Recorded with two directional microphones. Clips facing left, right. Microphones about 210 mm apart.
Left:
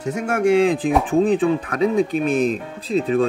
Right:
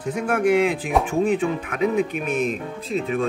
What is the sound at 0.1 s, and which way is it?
Speech, 25° left (ahead or behind).